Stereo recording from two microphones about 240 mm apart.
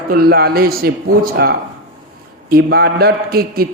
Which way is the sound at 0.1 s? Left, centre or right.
Right.